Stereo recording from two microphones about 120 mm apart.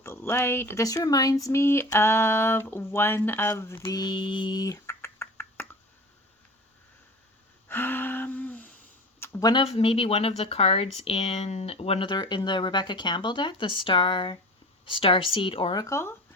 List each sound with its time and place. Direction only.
0.0 s speech: 20° left (ahead or behind)
3.8 s a sound: 40° left (ahead or behind); by 5.6 s 20° left (ahead or behind)
7.7 s gasp: 15° left (ahead or behind)
9.4 s speech: 35° left (ahead or behind)
9.6 s speech: 55° left (ahead or behind)
15.7 s speech: 30° left (ahead or behind)